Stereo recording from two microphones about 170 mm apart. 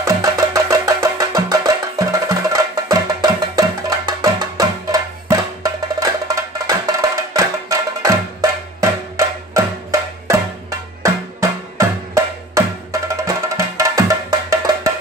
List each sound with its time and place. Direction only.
0.0 s music: 20° right (ahead or behind)